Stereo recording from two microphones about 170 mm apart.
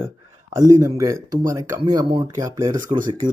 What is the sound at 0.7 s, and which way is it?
Speech, 20° right (ahead or behind).